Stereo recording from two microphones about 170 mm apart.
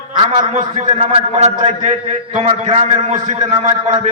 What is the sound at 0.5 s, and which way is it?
A man's voice, 45° right (ahead or behind).